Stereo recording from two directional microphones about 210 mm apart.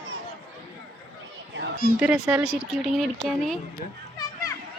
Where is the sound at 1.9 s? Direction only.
5° right (ahead or behind).